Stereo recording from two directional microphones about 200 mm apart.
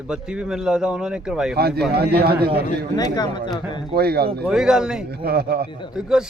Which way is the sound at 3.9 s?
50° right (ahead or behind).